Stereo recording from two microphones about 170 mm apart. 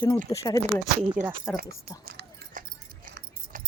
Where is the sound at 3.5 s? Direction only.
50° right (ahead or behind).